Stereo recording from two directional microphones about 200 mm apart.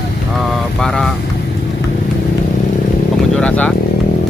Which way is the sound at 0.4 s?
Centre (ahead or behind).